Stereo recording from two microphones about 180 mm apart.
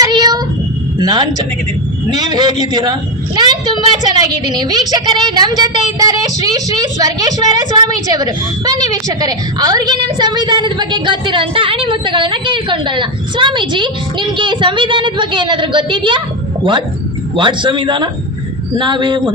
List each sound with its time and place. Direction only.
0.0 s cat: 20° right (ahead or behind)
0.9 s a woman's voice: 25° right (ahead or behind)
17.3 s a woman's voice: 25° right (ahead or behind)